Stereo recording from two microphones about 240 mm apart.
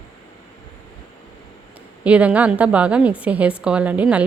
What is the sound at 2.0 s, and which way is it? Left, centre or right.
A woman's voice, centre.